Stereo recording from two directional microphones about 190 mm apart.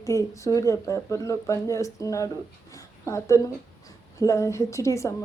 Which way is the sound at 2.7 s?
15° left (ahead or behind).